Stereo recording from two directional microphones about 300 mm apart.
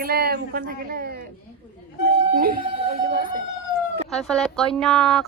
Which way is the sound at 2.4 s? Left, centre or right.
Right.